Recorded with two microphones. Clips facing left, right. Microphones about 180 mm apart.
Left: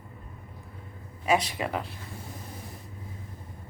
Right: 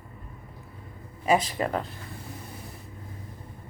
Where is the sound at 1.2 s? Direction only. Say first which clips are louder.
Right 2 dB; centre (ahead or behind).